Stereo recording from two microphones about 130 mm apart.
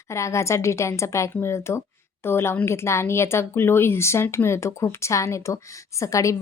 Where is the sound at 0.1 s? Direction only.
20° left (ahead or behind).